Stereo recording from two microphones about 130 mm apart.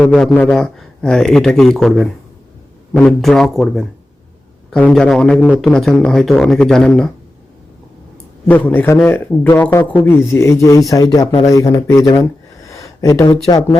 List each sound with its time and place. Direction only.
0.0 s a man's voice: 5° left (ahead or behind)
2.9 s speech: centre (ahead or behind)
8.4 s a man's voice: 10° left (ahead or behind)